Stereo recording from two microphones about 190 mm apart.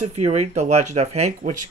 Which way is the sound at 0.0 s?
35° right (ahead or behind).